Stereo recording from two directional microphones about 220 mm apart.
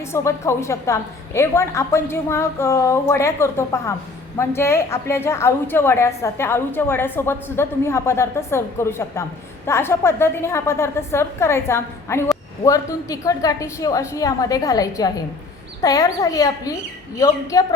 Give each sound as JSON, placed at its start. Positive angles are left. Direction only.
{"t": 0.1, "sound": "a woman's voice", "side_deg": 15}